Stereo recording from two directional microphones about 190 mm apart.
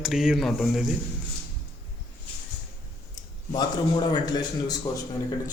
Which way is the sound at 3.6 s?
20° left (ahead or behind).